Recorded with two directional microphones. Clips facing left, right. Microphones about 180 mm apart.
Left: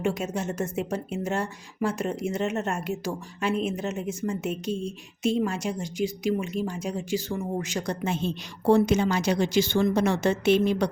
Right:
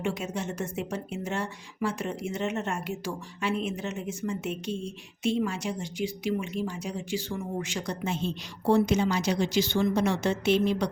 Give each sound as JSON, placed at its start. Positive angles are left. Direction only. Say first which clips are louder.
{"t": 0.0, "sound": "a woman's voice", "louder": "left 3 dB", "side_deg": 45}